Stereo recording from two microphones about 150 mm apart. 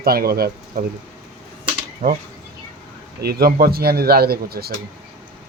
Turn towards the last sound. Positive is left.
turn(degrees=-90)